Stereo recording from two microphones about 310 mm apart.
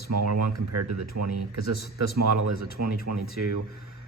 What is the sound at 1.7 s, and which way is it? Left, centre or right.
Speech, left.